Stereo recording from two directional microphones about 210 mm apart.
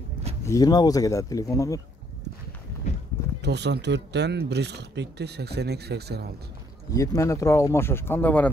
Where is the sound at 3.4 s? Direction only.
55° right (ahead or behind).